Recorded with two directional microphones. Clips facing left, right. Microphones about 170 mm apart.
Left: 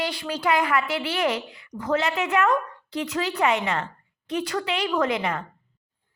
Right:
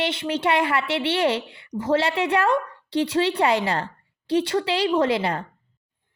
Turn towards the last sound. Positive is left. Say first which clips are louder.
# right 3 dB
turn(degrees=-30)  # may be behind; listen again after turning